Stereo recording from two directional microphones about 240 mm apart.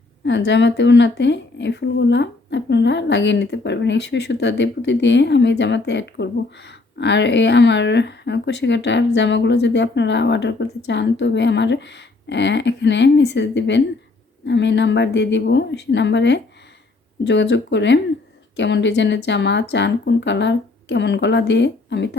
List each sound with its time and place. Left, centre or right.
0.3 s speech: left